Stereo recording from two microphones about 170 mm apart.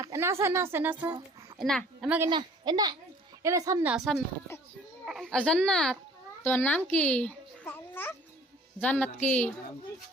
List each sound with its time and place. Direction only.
0.0 s a woman's voice: 15° right (ahead or behind)
1.5 s a child's voice: centre (ahead or behind)
2.3 s speech: 25° right (ahead or behind)
3.8 s a woman's voice: centre (ahead or behind)
6.9 s babbling: 10° left (ahead or behind)
8.8 s a woman's voice: 10° left (ahead or behind)